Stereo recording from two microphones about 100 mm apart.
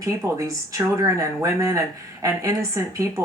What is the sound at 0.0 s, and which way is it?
Speech, 30° right (ahead or behind).